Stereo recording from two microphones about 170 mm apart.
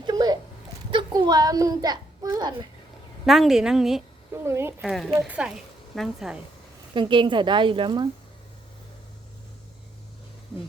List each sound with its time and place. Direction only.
0.0 s a sound: 25° right (ahead or behind)
0.9 s a child's voice: 30° right (ahead or behind)
3.2 s a woman's voice: centre (ahead or behind)
4.4 s speech: 15° right (ahead or behind)
4.8 s a woman's voice: centre (ahead or behind)
6.9 s a woman's voice: 30° right (ahead or behind)